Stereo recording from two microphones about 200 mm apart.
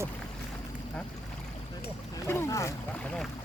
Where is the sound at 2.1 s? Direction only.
15° left (ahead or behind).